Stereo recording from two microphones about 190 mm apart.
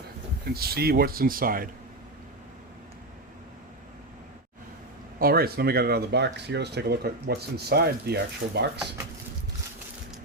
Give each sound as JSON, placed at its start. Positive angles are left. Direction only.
{"t": 0.4, "sound": "a man's voice", "side_deg": -55}
{"t": 5.2, "sound": "speech", "side_deg": -55}